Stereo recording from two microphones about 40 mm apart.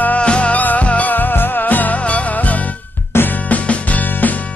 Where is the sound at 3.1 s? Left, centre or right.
Left.